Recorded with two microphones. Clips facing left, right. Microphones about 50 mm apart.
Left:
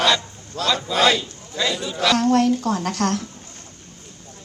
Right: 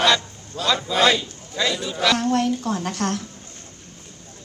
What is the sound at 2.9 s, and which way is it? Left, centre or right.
Speech, right.